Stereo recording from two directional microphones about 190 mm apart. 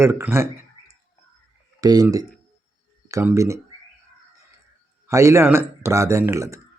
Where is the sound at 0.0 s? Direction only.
10° right (ahead or behind).